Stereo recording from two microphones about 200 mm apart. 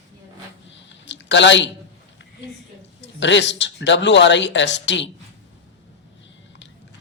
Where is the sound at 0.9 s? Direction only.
65° left (ahead or behind).